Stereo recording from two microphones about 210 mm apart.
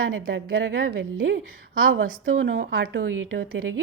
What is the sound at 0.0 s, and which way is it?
A woman's voice, 75° right (ahead or behind).